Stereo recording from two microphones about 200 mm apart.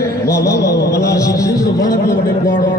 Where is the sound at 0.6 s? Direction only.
55° left (ahead or behind).